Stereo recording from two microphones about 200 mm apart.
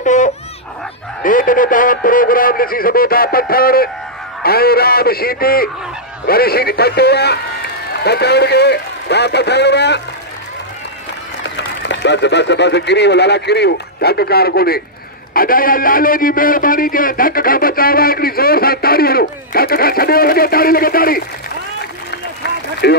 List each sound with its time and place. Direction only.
0.0 s babbling: 35° left (ahead or behind)
1.2 s a man's voice: 45° left (ahead or behind)
11.4 s a man's voice: 60° left (ahead or behind)
22.4 s a sound: 55° left (ahead or behind)